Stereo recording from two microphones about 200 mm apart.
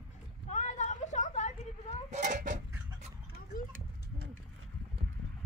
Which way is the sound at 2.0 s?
35° right (ahead or behind).